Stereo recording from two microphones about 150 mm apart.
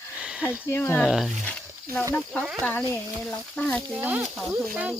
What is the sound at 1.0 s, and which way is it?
Speech, centre (ahead or behind).